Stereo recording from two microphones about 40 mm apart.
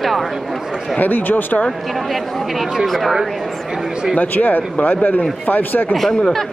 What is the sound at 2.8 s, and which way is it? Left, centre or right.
Speech, centre.